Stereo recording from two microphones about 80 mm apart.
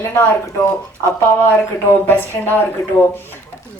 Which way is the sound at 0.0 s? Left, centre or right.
Left.